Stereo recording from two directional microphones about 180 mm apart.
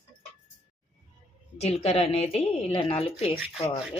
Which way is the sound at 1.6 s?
35° left (ahead or behind).